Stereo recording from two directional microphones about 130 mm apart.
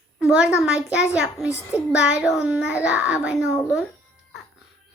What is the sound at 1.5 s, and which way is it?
Child singing, 20° left (ahead or behind).